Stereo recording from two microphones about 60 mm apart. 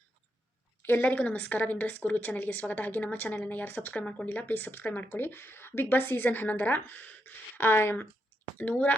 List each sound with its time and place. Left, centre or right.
0.8 s a sound: left
1.0 s a woman's voice: left
8.5 s a woman's voice: left